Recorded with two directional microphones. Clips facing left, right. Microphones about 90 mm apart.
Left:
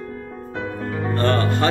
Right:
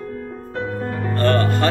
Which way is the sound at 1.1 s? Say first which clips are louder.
Right 2 dB; 20° left (ahead or behind).